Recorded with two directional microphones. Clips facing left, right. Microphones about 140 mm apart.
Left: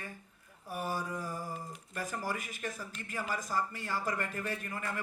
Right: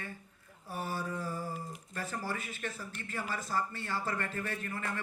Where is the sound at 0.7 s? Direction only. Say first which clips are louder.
Left 1 dB; 15° left (ahead or behind).